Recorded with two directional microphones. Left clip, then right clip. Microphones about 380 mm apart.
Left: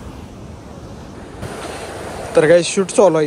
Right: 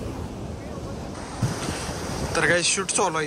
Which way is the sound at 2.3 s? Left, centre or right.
Centre.